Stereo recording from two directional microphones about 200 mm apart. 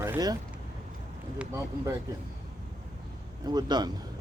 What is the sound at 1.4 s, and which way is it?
Speech, 15° right (ahead or behind).